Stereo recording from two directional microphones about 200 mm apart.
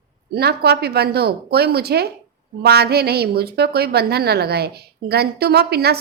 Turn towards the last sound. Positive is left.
turn(degrees=-55)  # may be behind; listen again after turning